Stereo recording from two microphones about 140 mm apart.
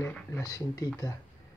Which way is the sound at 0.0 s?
15° left (ahead or behind).